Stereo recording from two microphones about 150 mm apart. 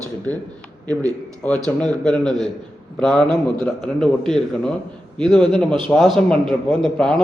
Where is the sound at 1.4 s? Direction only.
10° left (ahead or behind).